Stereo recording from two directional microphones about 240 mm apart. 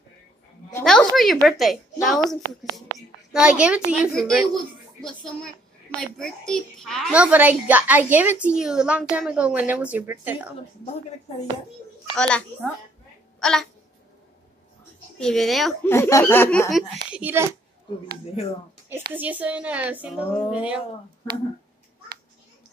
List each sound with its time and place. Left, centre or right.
0.7 s a sound: centre
1.1 s a child's voice: centre
3.3 s a child's voice: centre
12.2 s a child's voice: centre
13.4 s a sound: centre
15.1 s a child's voice: centre
19.1 s a child's voice: centre